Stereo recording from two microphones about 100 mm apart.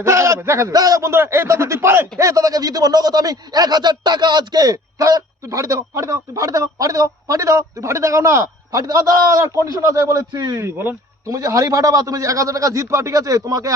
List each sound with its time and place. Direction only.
0.0 s speech: 30° right (ahead or behind)